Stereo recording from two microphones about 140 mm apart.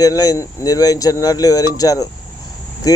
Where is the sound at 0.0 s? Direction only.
25° left (ahead or behind).